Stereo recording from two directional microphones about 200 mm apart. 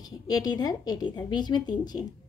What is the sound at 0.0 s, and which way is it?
A woman's voice, 20° left (ahead or behind).